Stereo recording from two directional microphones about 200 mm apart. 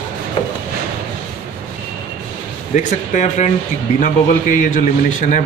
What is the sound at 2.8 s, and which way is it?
A man's voice, 35° left (ahead or behind).